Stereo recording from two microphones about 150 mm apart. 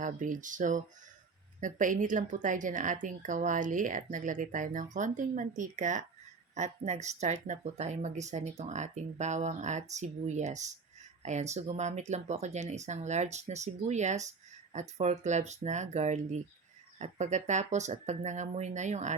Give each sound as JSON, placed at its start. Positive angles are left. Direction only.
{"t": 0.0, "sound": "speech", "side_deg": -60}